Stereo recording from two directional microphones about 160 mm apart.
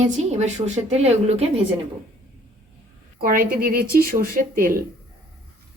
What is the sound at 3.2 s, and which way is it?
A woman's voice, 65° right (ahead or behind).